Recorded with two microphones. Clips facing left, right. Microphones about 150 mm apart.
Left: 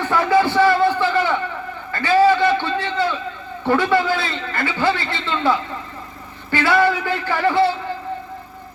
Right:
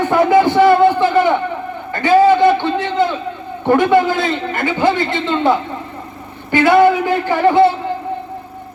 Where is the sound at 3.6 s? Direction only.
20° right (ahead or behind).